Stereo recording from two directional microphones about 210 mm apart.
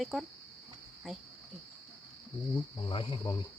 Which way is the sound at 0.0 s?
Centre (ahead or behind).